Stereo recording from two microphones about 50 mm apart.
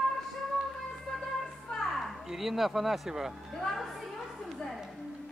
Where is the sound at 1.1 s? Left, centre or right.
Centre.